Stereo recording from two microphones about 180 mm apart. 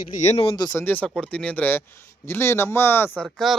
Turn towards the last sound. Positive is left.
turn(degrees=0)  # may be behind; listen again after turning